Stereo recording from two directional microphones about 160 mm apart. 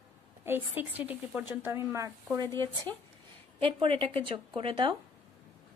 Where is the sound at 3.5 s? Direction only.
35° right (ahead or behind).